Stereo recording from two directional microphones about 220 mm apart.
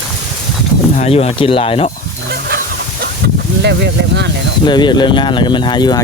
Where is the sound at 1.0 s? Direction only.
25° left (ahead or behind).